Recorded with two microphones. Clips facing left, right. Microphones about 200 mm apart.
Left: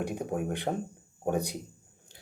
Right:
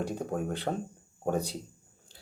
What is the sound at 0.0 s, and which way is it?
Speech, 15° left (ahead or behind).